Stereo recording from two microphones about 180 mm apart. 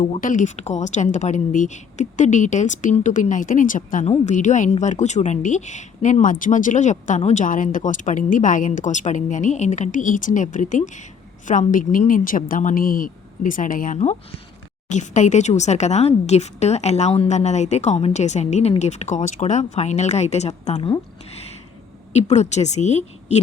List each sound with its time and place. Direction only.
0.2 s a woman's voice: 45° left (ahead or behind)
22.1 s speech: 40° left (ahead or behind)